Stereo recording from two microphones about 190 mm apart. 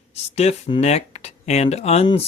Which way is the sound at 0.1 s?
35° left (ahead or behind).